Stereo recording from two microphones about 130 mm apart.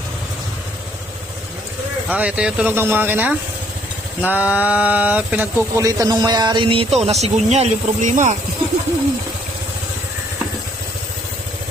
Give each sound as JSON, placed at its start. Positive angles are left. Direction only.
{"t": 2.0, "sound": "speech", "side_deg": -10}
{"t": 5.7, "sound": "a man's voice", "side_deg": -25}